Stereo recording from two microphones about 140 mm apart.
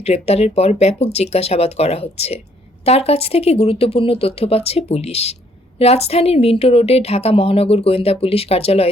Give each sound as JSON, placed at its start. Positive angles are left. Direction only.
{"t": 0.0, "sound": "speech", "side_deg": 45}